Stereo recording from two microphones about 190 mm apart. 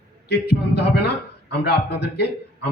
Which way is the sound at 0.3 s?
60° left (ahead or behind).